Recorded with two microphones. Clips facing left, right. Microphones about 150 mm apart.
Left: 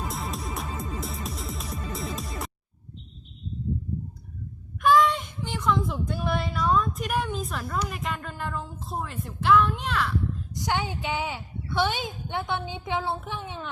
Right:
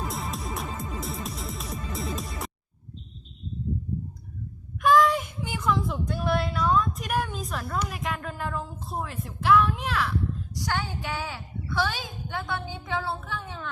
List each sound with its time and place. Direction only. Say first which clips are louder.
0.1 s music: even; centre (ahead or behind)
4.8 s a sound: even; centre (ahead or behind)
10.5 s a woman's voice: left 4 dB; 20° left (ahead or behind)